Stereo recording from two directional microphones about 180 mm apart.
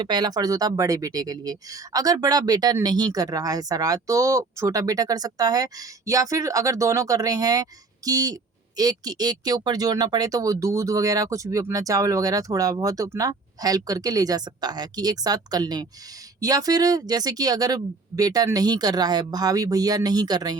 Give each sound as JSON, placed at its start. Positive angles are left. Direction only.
{"t": 0.0, "sound": "speech", "side_deg": -25}